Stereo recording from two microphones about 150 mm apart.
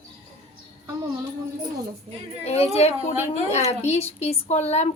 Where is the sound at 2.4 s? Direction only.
45° left (ahead or behind).